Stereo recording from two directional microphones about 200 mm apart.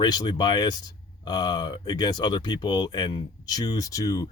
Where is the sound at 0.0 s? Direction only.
20° left (ahead or behind).